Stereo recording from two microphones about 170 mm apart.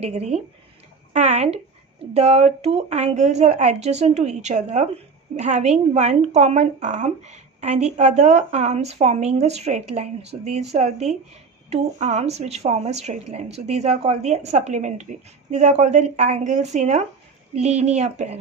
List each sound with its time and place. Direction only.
0.0 s a woman's voice: 40° right (ahead or behind)